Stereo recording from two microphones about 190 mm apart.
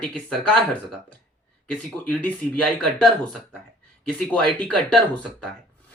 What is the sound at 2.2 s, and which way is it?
Speech, 5° left (ahead or behind).